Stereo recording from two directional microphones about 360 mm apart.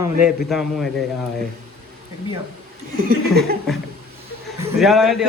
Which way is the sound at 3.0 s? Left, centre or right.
Right.